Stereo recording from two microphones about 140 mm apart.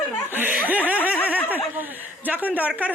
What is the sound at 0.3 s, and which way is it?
Snicker, 10° right (ahead or behind).